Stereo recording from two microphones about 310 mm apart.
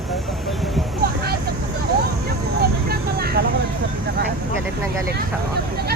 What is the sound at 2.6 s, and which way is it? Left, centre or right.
Vehicle, right.